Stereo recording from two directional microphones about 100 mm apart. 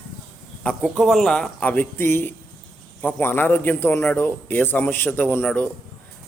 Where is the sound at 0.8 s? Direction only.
Centre (ahead or behind); by 5.7 s 15° left (ahead or behind).